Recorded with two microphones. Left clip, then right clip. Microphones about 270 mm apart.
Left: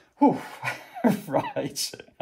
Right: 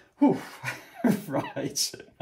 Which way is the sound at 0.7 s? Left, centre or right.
Centre.